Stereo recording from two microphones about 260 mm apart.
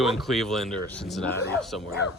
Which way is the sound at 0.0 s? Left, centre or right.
Centre.